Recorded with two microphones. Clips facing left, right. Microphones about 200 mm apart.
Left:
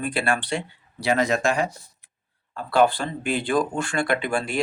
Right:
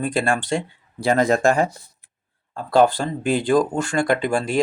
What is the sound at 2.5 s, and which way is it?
Speech, 40° right (ahead or behind).